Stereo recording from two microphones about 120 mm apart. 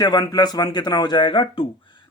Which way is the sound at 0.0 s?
35° left (ahead or behind).